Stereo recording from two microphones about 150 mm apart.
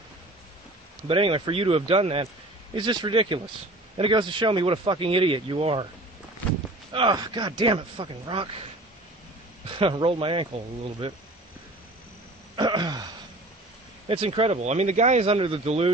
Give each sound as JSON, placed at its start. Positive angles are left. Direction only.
{"t": 1.0, "sound": "speech", "side_deg": -35}
{"t": 6.9, "sound": "speech", "side_deg": -30}
{"t": 9.8, "sound": "speech", "side_deg": -35}
{"t": 12.5, "sound": "a sound", "side_deg": -30}
{"t": 14.0, "sound": "speech", "side_deg": -35}